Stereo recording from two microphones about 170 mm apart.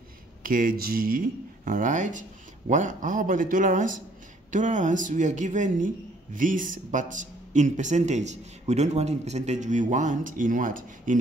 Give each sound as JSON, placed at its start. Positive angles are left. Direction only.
{"t": 0.4, "sound": "speech", "side_deg": -55}